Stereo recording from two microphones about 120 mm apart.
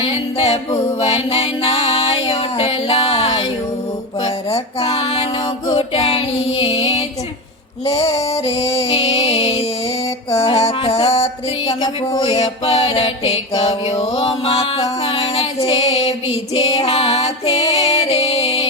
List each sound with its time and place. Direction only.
0.0 s music: 55° left (ahead or behind)
5.7 s female singing: 55° left (ahead or behind)
7.9 s music: 55° left (ahead or behind)
11.7 s music: 30° left (ahead or behind)
12.2 s music: 55° left (ahead or behind)
13.6 s mantra: 55° left (ahead or behind)
14.0 s music: 55° left (ahead or behind)